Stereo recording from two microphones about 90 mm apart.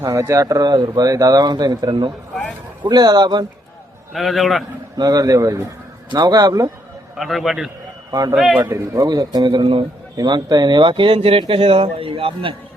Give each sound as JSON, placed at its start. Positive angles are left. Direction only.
{"t": 0.0, "sound": "speech", "side_deg": -35}
{"t": 4.1, "sound": "a man's voice", "side_deg": 0}
{"t": 4.9, "sound": "a man's voice", "side_deg": -45}
{"t": 6.1, "sound": "speech", "side_deg": -50}
{"t": 7.2, "sound": "a man's voice", "side_deg": 0}
{"t": 8.1, "sound": "speech", "side_deg": -45}